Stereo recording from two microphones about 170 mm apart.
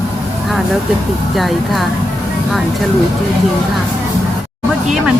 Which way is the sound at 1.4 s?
Centre (ahead or behind).